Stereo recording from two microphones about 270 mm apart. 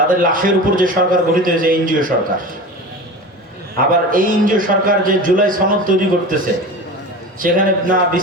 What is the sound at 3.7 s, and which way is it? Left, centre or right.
A man's voice, right.